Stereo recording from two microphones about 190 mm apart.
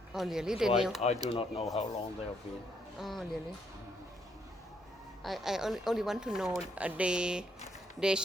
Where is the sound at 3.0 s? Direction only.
Centre (ahead or behind).